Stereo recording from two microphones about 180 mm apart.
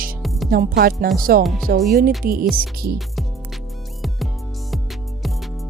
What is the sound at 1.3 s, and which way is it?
Speech, 55° right (ahead or behind).